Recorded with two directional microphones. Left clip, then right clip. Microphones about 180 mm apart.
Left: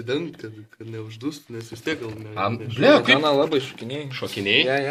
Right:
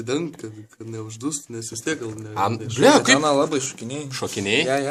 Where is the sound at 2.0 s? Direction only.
55° right (ahead or behind).